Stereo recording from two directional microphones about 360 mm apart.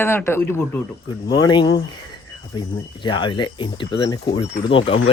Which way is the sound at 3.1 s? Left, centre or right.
Centre.